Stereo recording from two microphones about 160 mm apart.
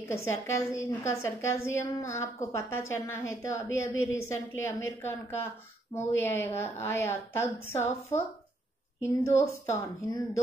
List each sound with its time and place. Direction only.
0.1 s a woman's voice: 15° left (ahead or behind)
9.0 s a woman's voice: 15° left (ahead or behind)